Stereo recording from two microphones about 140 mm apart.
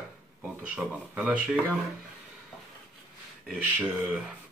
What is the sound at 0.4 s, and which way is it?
Speech, 5° right (ahead or behind).